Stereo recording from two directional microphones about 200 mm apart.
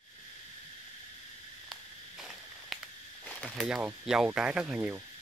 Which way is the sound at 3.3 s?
5° left (ahead or behind).